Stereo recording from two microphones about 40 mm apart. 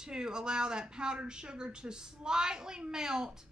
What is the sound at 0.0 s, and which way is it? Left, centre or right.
Speech, centre.